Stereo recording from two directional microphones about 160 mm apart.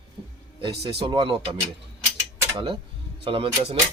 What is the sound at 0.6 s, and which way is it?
Speech, 35° right (ahead or behind).